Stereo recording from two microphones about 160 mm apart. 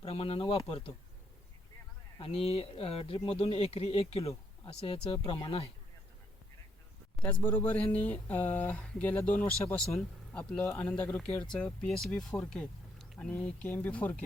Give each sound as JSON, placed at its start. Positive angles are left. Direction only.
{"t": 0.0, "sound": "speech", "side_deg": 40}
{"t": 2.1, "sound": "speech", "side_deg": 35}
{"t": 7.2, "sound": "speech", "side_deg": 10}